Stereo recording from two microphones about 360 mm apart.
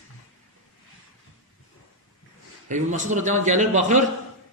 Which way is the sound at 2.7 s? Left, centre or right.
Centre.